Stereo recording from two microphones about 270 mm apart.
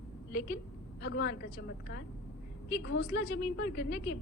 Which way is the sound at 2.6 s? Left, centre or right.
Left.